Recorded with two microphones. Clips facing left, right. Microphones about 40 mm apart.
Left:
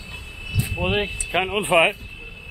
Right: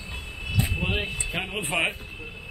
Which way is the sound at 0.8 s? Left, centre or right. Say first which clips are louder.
Left 5 dB; centre.